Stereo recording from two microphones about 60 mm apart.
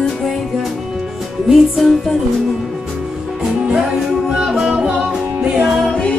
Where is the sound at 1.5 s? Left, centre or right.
Centre.